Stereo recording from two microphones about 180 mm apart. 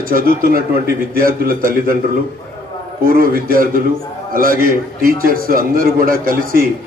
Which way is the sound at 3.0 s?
55° right (ahead or behind).